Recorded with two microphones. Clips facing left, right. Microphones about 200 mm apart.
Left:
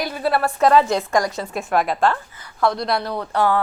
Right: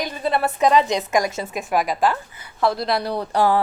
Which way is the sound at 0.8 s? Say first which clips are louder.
Left 1 dB; 20° right (ahead or behind).